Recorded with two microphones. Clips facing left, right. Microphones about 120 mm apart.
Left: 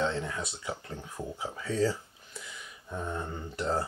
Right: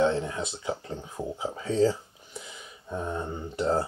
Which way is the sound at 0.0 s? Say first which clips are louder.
Right 6 dB; 25° right (ahead or behind).